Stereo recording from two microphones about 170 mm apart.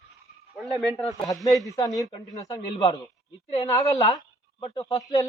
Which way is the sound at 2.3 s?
20° left (ahead or behind).